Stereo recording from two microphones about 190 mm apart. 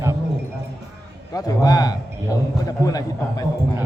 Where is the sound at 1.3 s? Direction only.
20° left (ahead or behind).